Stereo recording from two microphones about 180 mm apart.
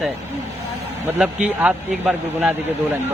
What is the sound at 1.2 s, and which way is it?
Speech, 5° right (ahead or behind).